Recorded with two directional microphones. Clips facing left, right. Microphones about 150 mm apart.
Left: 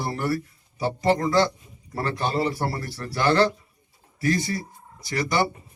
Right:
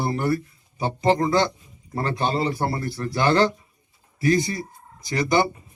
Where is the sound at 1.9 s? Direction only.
20° right (ahead or behind).